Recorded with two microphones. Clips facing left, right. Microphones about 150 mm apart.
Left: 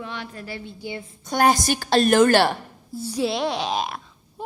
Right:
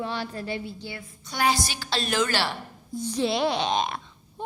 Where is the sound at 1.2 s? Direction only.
50° left (ahead or behind).